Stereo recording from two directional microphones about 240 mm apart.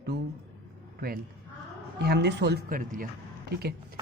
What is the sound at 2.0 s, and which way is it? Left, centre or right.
Speech, right.